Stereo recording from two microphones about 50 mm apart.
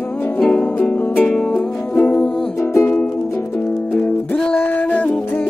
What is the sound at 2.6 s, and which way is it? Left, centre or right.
Music, left.